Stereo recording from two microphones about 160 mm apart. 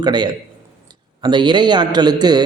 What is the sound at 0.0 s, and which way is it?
A man's voice, 25° right (ahead or behind).